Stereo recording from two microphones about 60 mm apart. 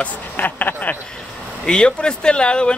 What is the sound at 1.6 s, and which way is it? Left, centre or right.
Speech, centre.